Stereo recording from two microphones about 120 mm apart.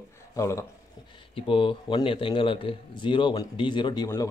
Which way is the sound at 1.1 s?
45° left (ahead or behind).